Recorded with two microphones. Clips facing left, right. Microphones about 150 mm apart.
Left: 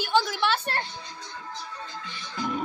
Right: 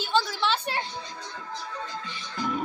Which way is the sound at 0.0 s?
15° left (ahead or behind).